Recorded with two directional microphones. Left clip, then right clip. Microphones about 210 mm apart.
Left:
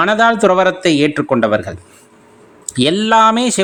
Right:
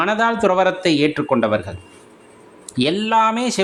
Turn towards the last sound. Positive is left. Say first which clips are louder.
# left 5 dB
turn(degrees=25)  # may be behind; listen again after turning